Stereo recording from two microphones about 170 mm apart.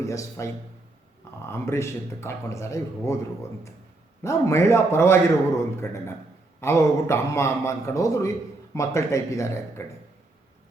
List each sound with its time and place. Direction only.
0.0 s speech: 15° left (ahead or behind)
4.2 s speech: 15° left (ahead or behind)